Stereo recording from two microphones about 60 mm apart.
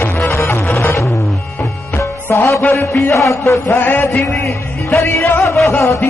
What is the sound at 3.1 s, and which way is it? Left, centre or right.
Speech, left.